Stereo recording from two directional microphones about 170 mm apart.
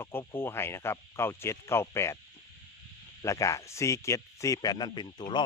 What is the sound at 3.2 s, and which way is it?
Speech, 20° left (ahead or behind).